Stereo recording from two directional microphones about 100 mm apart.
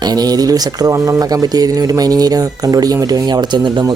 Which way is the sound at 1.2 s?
40° right (ahead or behind).